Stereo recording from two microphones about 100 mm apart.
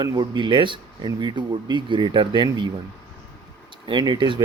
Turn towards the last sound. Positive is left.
turn(degrees=-50)  # may be behind; listen again after turning